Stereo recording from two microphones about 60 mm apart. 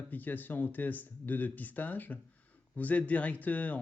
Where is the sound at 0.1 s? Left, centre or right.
Left.